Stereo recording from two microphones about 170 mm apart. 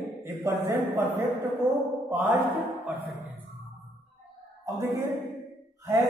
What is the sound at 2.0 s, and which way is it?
Mantra, 10° right (ahead or behind).